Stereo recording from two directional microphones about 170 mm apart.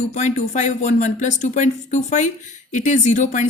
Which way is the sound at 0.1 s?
45° left (ahead or behind).